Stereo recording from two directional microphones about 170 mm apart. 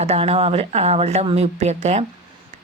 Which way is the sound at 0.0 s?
35° right (ahead or behind).